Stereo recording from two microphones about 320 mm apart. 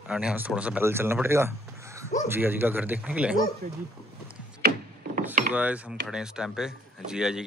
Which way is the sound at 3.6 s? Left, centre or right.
Right.